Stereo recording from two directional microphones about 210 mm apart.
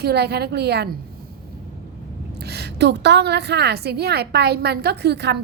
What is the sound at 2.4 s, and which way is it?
A woman's voice, 50° right (ahead or behind).